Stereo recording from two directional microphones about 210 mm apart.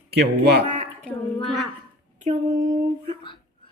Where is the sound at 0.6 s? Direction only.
35° right (ahead or behind).